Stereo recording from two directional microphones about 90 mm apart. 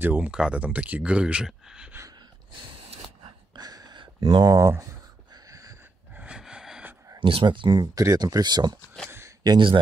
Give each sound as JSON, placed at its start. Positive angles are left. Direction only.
{"t": 0.0, "sound": "speech", "side_deg": -25}
{"t": 0.3, "sound": "speech", "side_deg": -10}
{"t": 3.5, "sound": "a sound", "side_deg": -50}
{"t": 4.4, "sound": "speech", "side_deg": -40}
{"t": 5.5, "sound": "a sound", "side_deg": -40}
{"t": 6.1, "sound": "snort", "side_deg": -10}
{"t": 7.2, "sound": "speech", "side_deg": -75}
{"t": 8.0, "sound": "speech", "side_deg": -40}